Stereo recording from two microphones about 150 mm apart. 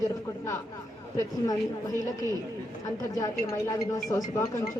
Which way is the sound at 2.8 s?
25° left (ahead or behind).